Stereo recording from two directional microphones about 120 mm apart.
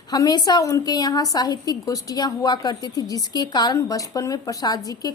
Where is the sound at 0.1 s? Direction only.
35° left (ahead or behind).